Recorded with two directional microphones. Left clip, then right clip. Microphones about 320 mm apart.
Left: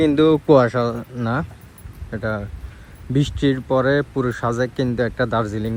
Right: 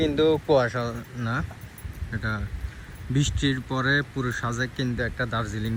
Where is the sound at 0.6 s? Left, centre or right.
Centre.